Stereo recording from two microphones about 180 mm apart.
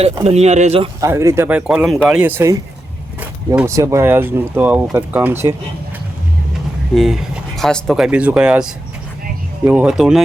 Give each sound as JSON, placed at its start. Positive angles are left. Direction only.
{"t": 0.0, "sound": "speech", "side_deg": -35}
{"t": 1.0, "sound": "speech", "side_deg": -15}
{"t": 6.9, "sound": "speech", "side_deg": 0}